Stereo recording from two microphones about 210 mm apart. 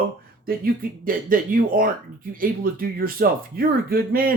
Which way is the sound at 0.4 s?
45° right (ahead or behind).